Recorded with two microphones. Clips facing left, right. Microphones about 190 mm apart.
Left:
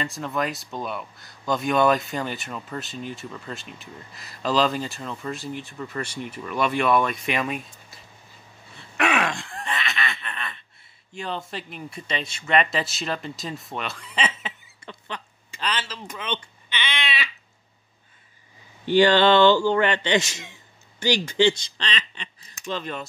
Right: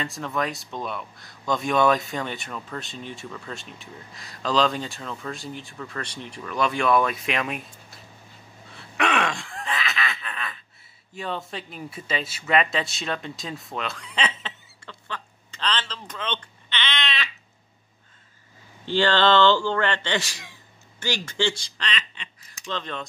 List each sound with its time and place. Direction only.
0.0 s speech: centre (ahead or behind)
8.7 s gasp: centre (ahead or behind)
11.1 s speech: centre (ahead or behind)
14.8 s a sound: 20° left (ahead or behind)
18.9 s a man's voice: 15° left (ahead or behind); by 22.3 s 35° left (ahead or behind)
22.7 s a man's voice: 10° left (ahead or behind)